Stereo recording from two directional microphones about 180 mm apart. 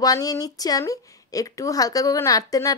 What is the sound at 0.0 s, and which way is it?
A woman's voice, 20° left (ahead or behind).